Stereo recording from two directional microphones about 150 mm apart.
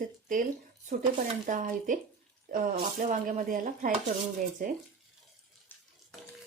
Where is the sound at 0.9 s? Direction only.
60° right (ahead or behind).